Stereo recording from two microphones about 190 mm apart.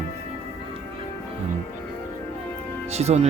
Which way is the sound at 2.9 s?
35° right (ahead or behind).